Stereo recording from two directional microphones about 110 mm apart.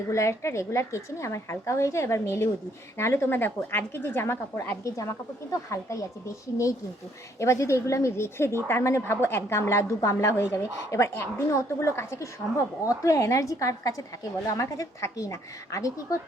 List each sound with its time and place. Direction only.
0.1 s a woman's voice: 25° left (ahead or behind)